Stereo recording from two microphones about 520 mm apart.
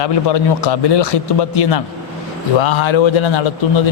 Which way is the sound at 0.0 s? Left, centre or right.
Left.